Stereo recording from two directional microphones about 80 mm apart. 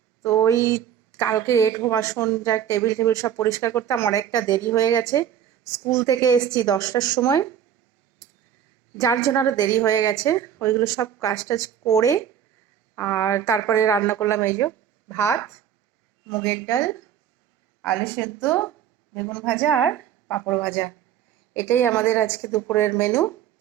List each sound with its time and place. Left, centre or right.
0.2 s a sound: left
1.3 s a woman's voice: left
6.4 s a woman's voice: left
7.2 s speech: left
9.0 s speech: left
9.6 s a woman's voice: left
13.0 s a woman's voice: left
18.0 s a woman's voice: left